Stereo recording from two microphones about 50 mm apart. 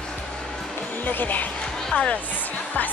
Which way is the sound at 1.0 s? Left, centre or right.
Left.